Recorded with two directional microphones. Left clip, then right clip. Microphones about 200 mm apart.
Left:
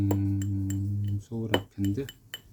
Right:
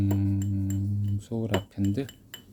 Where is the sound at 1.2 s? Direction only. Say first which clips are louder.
Right 4 dB; 20° right (ahead or behind).